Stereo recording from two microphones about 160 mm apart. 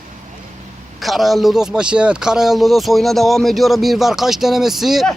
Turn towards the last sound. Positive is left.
turn(degrees=0)  # may be behind; listen again after turning